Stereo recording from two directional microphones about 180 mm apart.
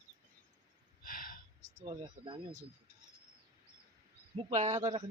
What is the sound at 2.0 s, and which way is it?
Speech, 30° right (ahead or behind).